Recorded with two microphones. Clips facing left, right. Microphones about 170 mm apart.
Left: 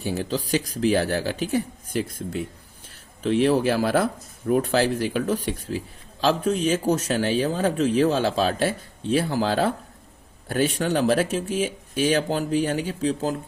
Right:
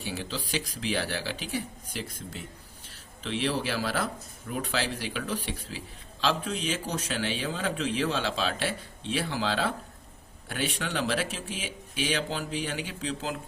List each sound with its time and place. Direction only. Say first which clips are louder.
0.0 s speech: left 8 dB; 45° left (ahead or behind)